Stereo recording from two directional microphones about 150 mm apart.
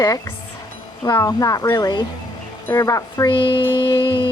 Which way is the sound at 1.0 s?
20° left (ahead or behind).